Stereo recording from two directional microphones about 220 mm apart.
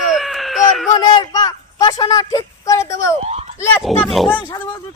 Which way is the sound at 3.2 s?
30° right (ahead or behind).